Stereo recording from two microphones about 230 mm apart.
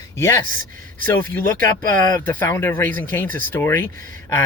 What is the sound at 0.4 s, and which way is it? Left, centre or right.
Speech, right.